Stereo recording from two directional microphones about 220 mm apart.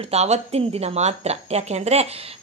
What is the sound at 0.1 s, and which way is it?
A woman's voice, 30° right (ahead or behind).